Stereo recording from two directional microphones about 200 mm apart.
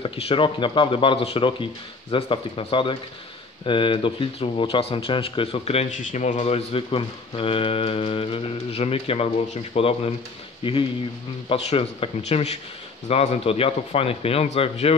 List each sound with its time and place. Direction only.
0.0 s speech: 25° left (ahead or behind)